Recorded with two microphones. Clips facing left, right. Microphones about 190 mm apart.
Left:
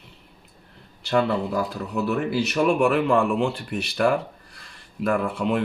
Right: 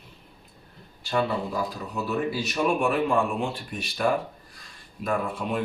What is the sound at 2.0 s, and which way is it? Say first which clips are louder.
Speech: left 4 dB; 75° left (ahead or behind).